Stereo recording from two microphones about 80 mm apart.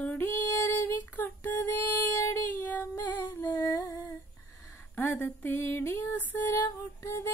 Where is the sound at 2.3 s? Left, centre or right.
Left.